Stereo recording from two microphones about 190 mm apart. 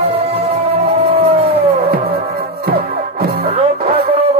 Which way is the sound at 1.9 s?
55° right (ahead or behind).